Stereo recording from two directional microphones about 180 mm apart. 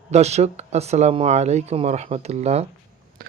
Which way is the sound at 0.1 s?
35° right (ahead or behind).